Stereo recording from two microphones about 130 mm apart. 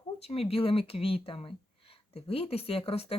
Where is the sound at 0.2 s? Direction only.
50° left (ahead or behind).